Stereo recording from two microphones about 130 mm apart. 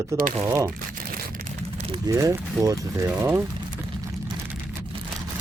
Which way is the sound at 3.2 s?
20° right (ahead or behind).